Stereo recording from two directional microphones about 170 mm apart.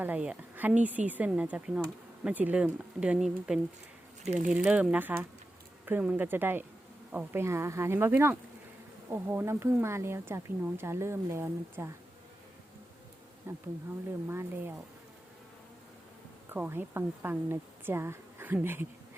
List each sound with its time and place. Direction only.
0.0 s speech: 10° right (ahead or behind)
4.2 s speech: 45° right (ahead or behind)
4.5 s speech: 5° right (ahead or behind)
13.5 s speech: 15° right (ahead or behind)
16.5 s speech: 10° right (ahead or behind)